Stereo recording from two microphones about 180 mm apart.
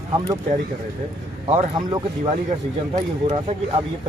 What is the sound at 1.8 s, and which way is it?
Speech, 25° right (ahead or behind).